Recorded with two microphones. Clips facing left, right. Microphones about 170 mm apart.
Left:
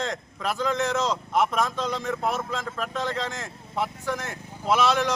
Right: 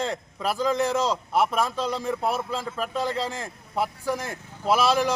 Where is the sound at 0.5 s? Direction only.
35° right (ahead or behind).